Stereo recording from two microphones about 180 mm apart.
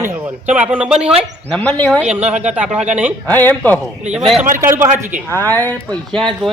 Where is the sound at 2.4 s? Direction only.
5° right (ahead or behind).